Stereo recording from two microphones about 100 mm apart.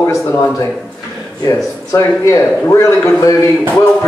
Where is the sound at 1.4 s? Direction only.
30° left (ahead or behind).